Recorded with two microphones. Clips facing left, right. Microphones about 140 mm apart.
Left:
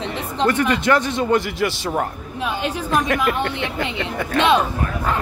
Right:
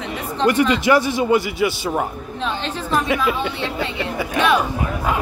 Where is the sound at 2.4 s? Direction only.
10° left (ahead or behind).